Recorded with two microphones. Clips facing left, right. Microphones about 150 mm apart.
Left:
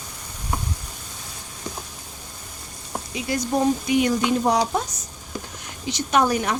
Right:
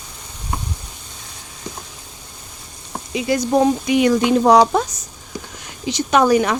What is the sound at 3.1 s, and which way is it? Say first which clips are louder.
Speech: right 7 dB; 90° right.